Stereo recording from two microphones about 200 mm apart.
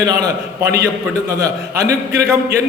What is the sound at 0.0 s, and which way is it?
A man's voice, 15° right (ahead or behind).